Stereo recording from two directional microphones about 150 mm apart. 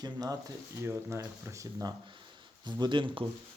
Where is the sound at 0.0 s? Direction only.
25° right (ahead or behind).